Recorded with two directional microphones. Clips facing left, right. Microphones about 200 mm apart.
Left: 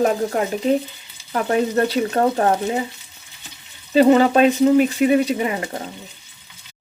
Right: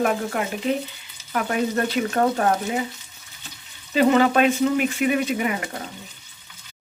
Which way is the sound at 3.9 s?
35° left (ahead or behind).